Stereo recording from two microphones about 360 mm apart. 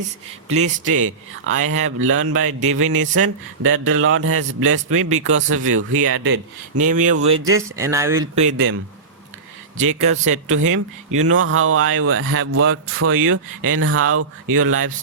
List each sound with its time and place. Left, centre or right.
0.5 s speech: right
7.4 s speech: centre
8.4 s speech: right
9.7 s speech: right